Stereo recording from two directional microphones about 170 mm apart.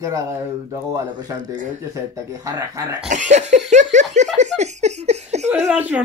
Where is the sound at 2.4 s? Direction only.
20° right (ahead or behind).